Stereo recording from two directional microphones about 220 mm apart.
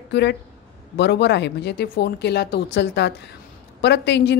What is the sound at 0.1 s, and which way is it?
A woman's voice, 50° left (ahead or behind).